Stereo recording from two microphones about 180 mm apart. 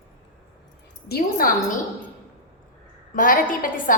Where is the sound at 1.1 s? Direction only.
50° left (ahead or behind).